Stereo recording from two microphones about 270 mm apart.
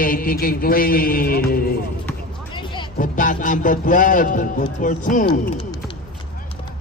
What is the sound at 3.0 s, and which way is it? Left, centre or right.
A man's voice, left.